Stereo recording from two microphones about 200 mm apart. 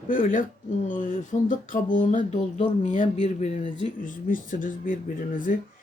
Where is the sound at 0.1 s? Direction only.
40° left (ahead or behind).